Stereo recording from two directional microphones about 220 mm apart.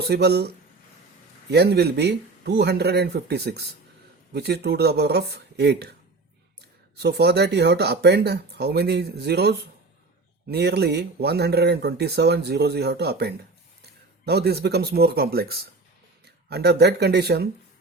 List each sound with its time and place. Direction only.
0.0 s speech: 50° right (ahead or behind)
7.0 s speech: 50° right (ahead or behind)